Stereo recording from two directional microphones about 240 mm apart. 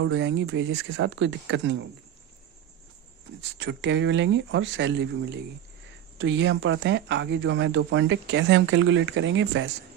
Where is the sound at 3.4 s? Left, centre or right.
Right.